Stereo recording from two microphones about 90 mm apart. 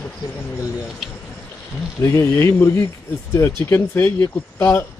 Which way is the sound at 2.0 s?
30° left (ahead or behind).